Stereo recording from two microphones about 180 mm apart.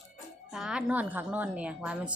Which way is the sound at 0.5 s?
5° right (ahead or behind).